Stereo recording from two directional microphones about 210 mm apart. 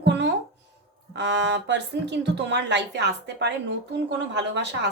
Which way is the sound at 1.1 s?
55° right (ahead or behind).